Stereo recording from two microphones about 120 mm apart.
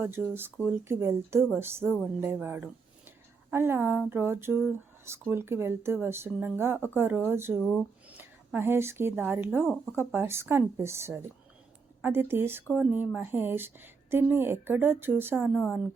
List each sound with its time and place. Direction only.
0.0 s speech: 20° right (ahead or behind)
15.4 s speech: centre (ahead or behind)